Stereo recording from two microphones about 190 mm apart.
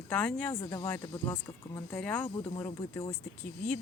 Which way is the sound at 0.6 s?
20° left (ahead or behind).